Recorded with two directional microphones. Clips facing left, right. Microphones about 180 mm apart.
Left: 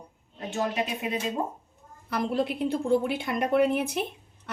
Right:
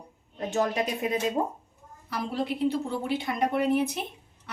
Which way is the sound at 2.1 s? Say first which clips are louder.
Left 3 dB; 55° left (ahead or behind).